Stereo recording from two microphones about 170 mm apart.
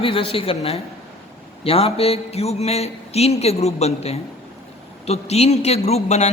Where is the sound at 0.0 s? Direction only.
30° left (ahead or behind).